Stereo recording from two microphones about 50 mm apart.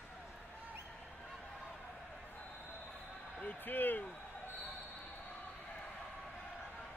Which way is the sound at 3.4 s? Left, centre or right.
Left.